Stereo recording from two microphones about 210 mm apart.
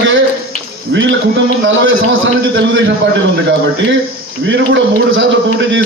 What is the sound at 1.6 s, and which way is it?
Speech, 65° right (ahead or behind).